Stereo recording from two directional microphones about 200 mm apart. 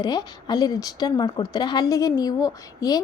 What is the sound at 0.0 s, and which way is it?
A woman's voice, 20° left (ahead or behind).